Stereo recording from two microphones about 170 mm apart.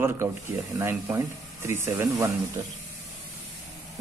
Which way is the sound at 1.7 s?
15° right (ahead or behind).